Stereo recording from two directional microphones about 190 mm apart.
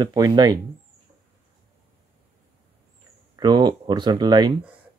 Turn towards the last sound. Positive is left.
turn(degrees=-25)  # may be behind; listen again after turning